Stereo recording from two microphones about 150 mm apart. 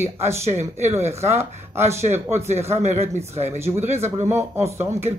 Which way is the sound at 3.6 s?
15° right (ahead or behind).